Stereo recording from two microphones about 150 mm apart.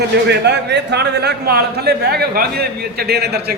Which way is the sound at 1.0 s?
90° right.